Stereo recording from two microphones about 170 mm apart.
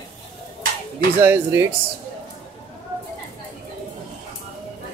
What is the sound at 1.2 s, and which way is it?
Speech, 15° right (ahead or behind).